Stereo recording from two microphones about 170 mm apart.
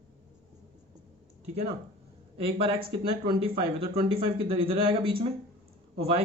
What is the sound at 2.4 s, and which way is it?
Speech, 30° right (ahead or behind).